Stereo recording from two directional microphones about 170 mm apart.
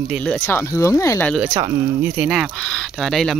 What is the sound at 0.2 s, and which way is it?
Speech, 10° left (ahead or behind).